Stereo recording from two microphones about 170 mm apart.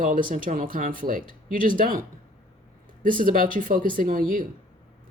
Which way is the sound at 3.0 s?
55° right (ahead or behind).